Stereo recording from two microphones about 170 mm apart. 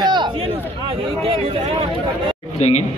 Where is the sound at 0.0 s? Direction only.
25° right (ahead or behind).